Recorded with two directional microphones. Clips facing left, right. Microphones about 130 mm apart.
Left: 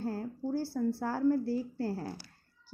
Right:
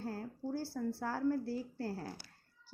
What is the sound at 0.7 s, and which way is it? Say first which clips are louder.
A woman's voice: left 6 dB; 35° left (ahead or behind).